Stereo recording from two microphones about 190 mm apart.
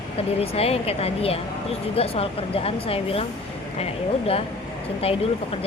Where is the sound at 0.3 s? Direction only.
30° left (ahead or behind).